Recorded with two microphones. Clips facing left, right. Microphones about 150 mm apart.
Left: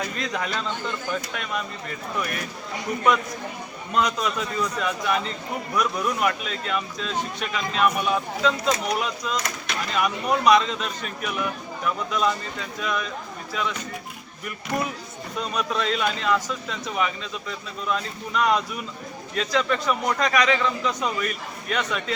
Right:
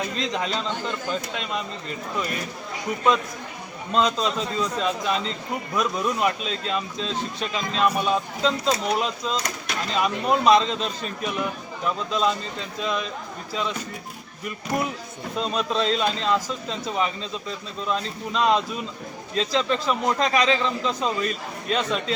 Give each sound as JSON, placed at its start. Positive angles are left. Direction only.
{"t": 0.0, "sound": "speech", "side_deg": -25}
{"t": 3.9, "sound": "speech", "side_deg": -25}
{"t": 15.4, "sound": "speech", "side_deg": -25}